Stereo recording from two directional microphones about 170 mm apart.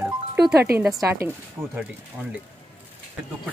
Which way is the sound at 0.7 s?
60° right (ahead or behind).